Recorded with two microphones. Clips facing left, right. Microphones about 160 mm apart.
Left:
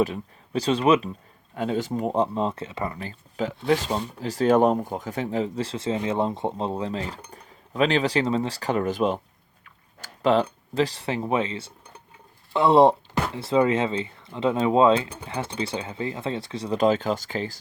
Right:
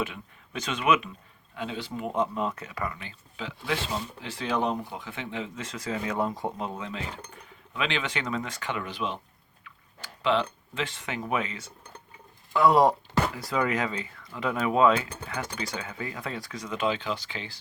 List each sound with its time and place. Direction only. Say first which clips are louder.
0.0 s speech: left 9 dB; 35° left (ahead or behind)
1.5 s speech: left 8 dB; 45° left (ahead or behind)
9.6 s tick-tock: even; 45° left (ahead or behind)
10.8 s speech: left 9 dB; 35° left (ahead or behind)